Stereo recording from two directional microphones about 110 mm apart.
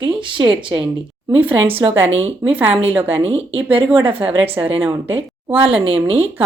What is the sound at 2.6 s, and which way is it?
Speech, 60° right (ahead or behind).